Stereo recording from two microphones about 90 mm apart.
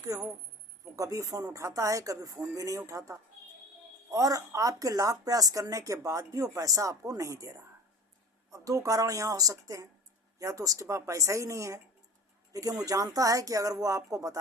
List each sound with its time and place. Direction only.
0.0 s speech: 40° right (ahead or behind)
12.8 s speech: 45° right (ahead or behind)